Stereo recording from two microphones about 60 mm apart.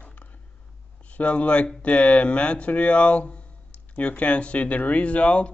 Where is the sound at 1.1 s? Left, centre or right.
Left.